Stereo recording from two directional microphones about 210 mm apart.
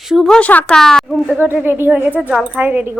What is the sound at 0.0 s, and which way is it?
Speech, centre (ahead or behind).